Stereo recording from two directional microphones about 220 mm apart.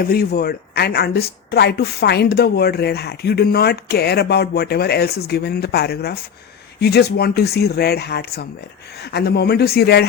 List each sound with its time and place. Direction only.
0.0 s speech: 45° left (ahead or behind)